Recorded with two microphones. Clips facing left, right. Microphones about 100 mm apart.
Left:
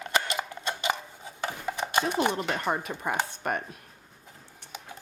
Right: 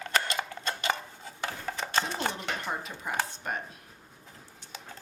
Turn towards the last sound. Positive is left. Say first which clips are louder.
# left 3 dB
turn(degrees=55)  # may be behind; listen again after turning